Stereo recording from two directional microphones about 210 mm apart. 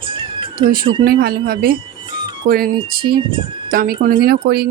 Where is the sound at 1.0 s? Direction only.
45° right (ahead or behind).